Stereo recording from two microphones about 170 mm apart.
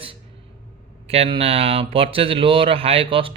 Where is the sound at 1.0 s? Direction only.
35° right (ahead or behind).